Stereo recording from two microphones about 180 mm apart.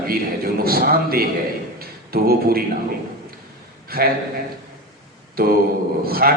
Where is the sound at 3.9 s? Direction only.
55° right (ahead or behind).